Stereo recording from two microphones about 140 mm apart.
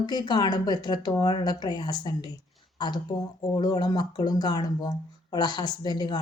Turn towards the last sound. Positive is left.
turn(degrees=30)  # may be behind; listen again after turning